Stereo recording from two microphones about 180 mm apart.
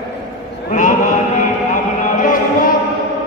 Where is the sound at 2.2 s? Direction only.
45° left (ahead or behind).